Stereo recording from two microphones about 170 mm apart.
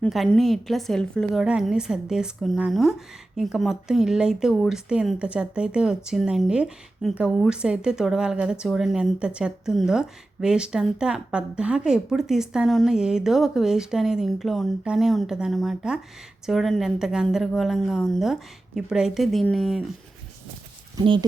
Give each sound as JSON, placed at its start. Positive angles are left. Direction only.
{"t": 0.0, "sound": "speech", "side_deg": 5}
{"t": 20.9, "sound": "speech", "side_deg": -25}